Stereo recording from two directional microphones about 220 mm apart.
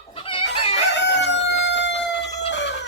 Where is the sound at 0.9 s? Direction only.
50° left (ahead or behind).